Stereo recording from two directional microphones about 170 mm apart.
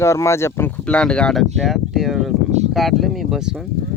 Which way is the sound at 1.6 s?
Centre (ahead or behind).